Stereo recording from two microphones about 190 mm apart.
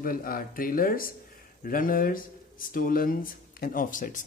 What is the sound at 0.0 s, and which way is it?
Speech, 50° left (ahead or behind).